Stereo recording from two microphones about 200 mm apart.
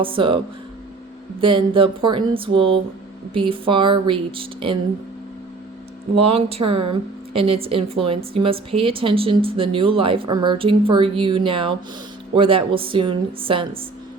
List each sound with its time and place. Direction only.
0.0 s a woman's voice: 25° right (ahead or behind)
1.4 s a woman's voice: 25° right (ahead or behind)
6.3 s a woman's voice: 30° right (ahead or behind)